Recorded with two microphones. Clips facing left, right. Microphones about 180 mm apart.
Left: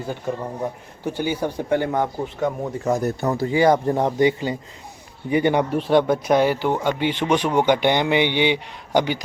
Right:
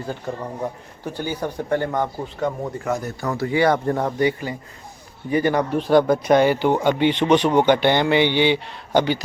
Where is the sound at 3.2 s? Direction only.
25° left (ahead or behind).